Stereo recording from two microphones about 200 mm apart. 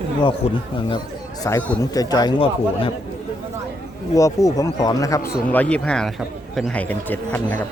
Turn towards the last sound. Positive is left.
turn(degrees=10)  # may be behind; listen again after turning